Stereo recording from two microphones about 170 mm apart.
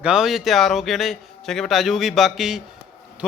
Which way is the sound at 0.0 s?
5° right (ahead or behind).